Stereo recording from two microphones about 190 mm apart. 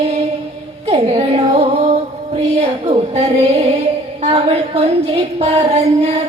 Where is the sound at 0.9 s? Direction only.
30° right (ahead or behind).